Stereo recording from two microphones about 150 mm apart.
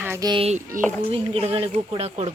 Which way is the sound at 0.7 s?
65° right (ahead or behind).